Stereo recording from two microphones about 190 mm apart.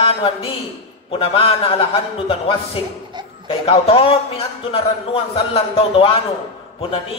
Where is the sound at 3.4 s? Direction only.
30° left (ahead or behind).